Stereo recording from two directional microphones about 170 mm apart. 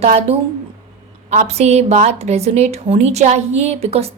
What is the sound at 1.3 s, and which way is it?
A woman's voice, 40° right (ahead or behind).